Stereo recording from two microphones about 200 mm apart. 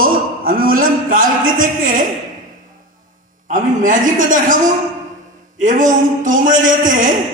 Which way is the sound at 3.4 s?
40° right (ahead or behind).